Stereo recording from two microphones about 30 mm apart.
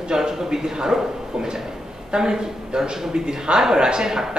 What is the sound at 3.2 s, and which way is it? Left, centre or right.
A man's voice, right.